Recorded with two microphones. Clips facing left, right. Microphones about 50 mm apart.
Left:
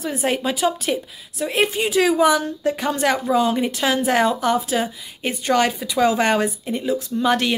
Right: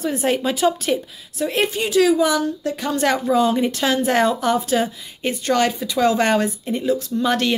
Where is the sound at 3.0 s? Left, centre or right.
Centre.